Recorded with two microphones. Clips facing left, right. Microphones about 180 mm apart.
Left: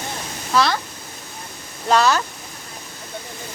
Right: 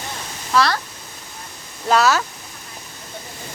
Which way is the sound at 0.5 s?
Centre (ahead or behind).